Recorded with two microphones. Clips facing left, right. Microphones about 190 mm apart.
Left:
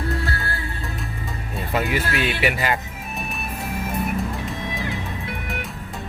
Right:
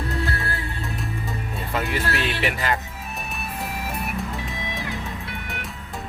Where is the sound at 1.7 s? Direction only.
5° left (ahead or behind).